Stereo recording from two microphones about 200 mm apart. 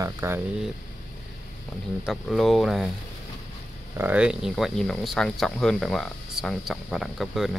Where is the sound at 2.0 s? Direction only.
Centre (ahead or behind).